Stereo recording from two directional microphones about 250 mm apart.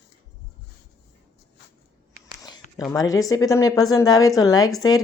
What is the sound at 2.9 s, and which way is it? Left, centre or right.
A woman's voice, centre.